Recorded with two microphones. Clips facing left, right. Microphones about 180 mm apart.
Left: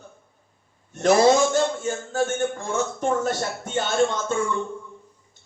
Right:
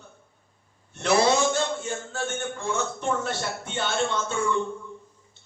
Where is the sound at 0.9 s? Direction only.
45° left (ahead or behind).